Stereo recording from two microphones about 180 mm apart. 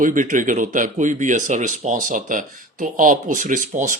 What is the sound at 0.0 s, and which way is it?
Speech, 45° right (ahead or behind).